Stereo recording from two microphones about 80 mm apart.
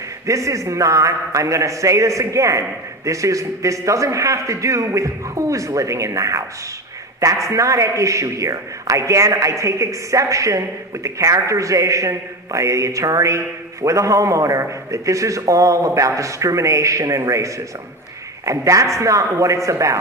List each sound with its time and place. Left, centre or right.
0.3 s a man's voice: right